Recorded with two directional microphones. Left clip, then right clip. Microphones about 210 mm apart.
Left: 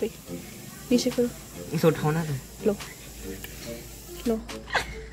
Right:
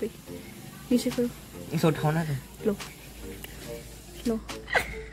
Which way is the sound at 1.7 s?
20° right (ahead or behind).